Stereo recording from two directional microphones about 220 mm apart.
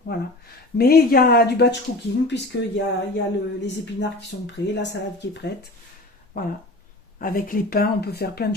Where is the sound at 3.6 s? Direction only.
55° left (ahead or behind).